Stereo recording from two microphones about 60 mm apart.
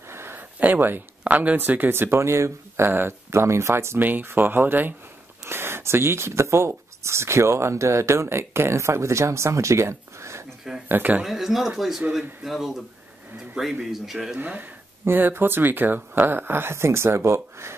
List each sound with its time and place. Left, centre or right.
0.1 s a sound: right
0.6 s speech: right
4.0 s speech: right
10.9 s speech: right
11.2 s speech: centre
14.4 s speech: right